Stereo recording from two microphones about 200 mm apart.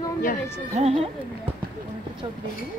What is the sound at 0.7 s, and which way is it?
Speech, 30° right (ahead or behind).